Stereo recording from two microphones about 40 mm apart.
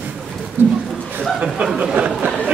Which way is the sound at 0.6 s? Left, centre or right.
Right.